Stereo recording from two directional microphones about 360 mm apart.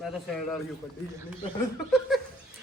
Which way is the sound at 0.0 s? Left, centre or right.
Centre.